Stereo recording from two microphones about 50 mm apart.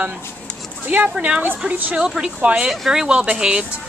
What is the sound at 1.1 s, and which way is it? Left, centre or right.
Speech, right.